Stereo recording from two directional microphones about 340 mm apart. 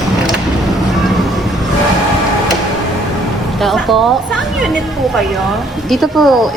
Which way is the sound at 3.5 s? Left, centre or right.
Centre.